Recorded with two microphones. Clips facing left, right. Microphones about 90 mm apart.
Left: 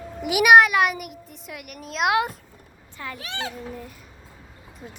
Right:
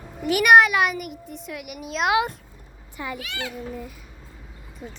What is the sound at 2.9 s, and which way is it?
Speech, 15° right (ahead or behind).